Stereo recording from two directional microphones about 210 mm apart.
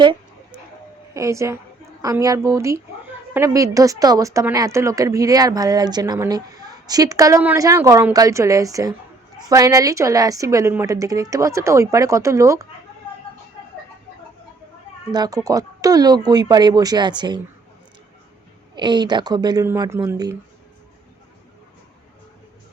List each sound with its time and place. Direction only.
1.1 s a woman's voice: 15° right (ahead or behind)
15.1 s speech: 20° right (ahead or behind)
18.8 s speech: 20° right (ahead or behind)